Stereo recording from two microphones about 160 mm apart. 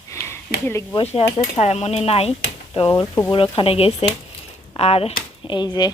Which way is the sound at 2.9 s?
20° left (ahead or behind).